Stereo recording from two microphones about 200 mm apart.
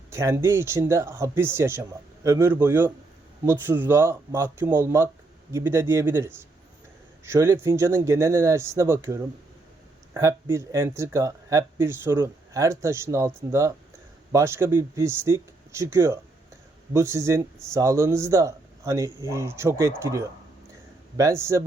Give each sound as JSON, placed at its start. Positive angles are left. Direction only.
{"t": 0.1, "sound": "speech", "side_deg": -15}